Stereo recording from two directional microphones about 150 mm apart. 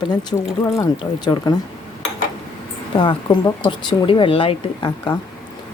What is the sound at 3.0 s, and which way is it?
Speech, 35° left (ahead or behind).